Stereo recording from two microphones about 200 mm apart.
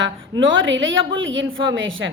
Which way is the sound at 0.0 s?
70° right (ahead or behind).